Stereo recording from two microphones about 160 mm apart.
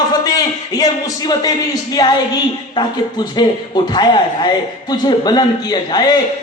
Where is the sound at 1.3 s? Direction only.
25° left (ahead or behind).